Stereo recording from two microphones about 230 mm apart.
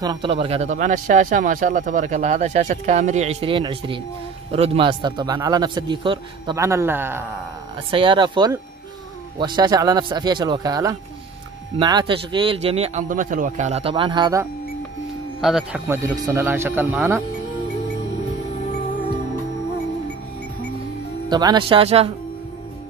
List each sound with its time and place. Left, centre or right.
0.0 s a man's voice: centre
7.9 s a man's voice: right
15.4 s a man's voice: centre
21.3 s a man's voice: centre